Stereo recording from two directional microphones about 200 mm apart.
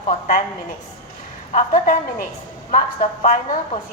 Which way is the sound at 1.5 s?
40° left (ahead or behind).